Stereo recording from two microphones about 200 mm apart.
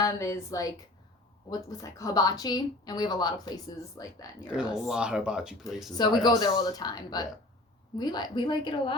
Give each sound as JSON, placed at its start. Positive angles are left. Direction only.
{"t": 0.0, "sound": "a woman's voice", "side_deg": 15}
{"t": 4.5, "sound": "speech", "side_deg": -5}
{"t": 5.9, "sound": "speech", "side_deg": 20}